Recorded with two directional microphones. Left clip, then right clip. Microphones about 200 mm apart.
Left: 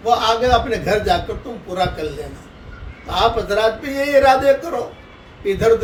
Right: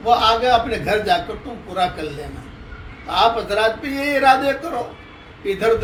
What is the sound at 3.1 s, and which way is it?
Speech, 15° left (ahead or behind).